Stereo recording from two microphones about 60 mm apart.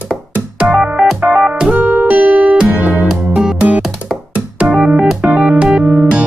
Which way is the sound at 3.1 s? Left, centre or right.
Centre.